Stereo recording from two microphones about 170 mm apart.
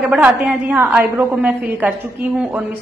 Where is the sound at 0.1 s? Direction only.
5° right (ahead or behind).